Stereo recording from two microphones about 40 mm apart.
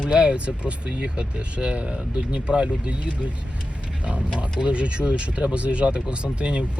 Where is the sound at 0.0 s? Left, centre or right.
Right.